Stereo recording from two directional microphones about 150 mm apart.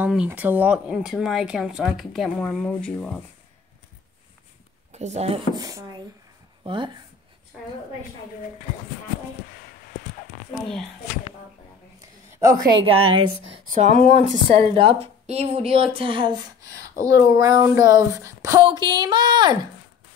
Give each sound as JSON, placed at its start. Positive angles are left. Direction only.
{"t": 0.0, "sound": "speech", "side_deg": -10}
{"t": 4.9, "sound": "speech", "side_deg": -50}
{"t": 5.5, "sound": "speech", "side_deg": -25}
{"t": 12.3, "sound": "a sound", "side_deg": -20}
{"t": 12.7, "sound": "a woman's voice", "side_deg": -35}
{"t": 13.7, "sound": "speech", "side_deg": -55}
{"t": 14.5, "sound": "a woman's voice", "side_deg": -35}